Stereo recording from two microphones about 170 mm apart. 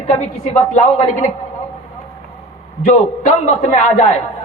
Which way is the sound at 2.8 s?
45° left (ahead or behind).